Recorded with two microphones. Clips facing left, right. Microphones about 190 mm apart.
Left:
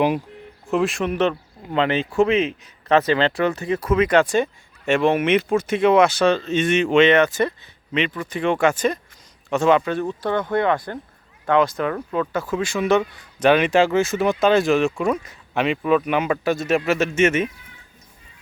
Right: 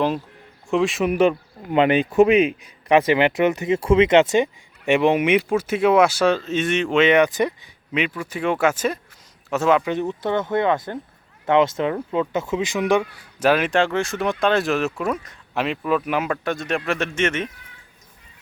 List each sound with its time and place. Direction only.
0.7 s speech: centre (ahead or behind)
7.1 s speech: 15° right (ahead or behind)
9.8 s speech: 20° right (ahead or behind); by 17.5 s 5° left (ahead or behind)